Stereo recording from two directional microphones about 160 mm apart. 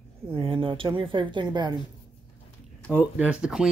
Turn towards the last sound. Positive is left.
turn(degrees=-5)  # may be behind; listen again after turning